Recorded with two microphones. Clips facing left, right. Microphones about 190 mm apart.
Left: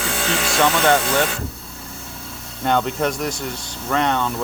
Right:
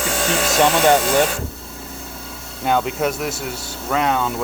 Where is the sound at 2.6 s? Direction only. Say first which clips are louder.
Even; 5° right (ahead or behind).